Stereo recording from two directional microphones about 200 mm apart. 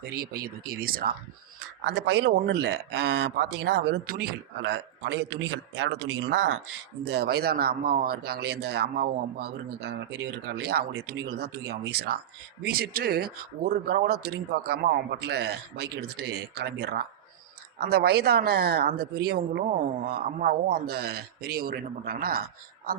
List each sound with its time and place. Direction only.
0.0 s speech: 50° right (ahead or behind)
1.8 s speech: 55° right (ahead or behind)
7.0 s speech: 55° right (ahead or behind)